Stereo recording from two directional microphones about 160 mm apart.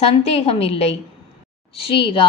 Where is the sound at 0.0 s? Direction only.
40° left (ahead or behind).